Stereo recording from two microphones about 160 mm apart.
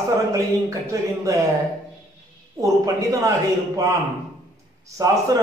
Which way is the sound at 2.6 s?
20° right (ahead or behind).